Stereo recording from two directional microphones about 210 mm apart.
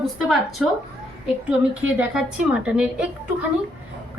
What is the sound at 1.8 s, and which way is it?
A woman's voice, 5° right (ahead or behind).